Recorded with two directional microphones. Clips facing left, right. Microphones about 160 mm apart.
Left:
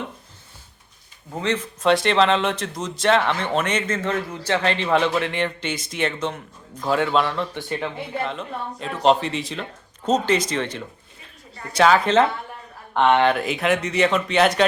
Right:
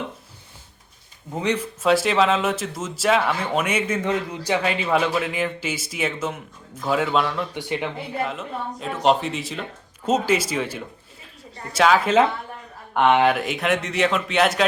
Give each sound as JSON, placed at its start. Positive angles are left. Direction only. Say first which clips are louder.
{"t": 1.4, "sound": "speech", "louder": "right 1 dB", "side_deg": -10}
{"t": 7.5, "sound": "speech", "louder": "right 1 dB", "side_deg": -15}